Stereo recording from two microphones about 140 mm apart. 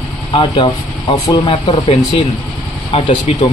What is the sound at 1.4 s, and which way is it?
Speech, 50° left (ahead or behind).